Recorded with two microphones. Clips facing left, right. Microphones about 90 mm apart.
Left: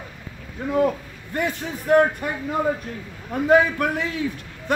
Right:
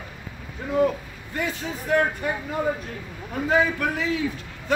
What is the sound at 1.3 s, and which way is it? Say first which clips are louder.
Speech: left 3 dB; 55° left (ahead or behind).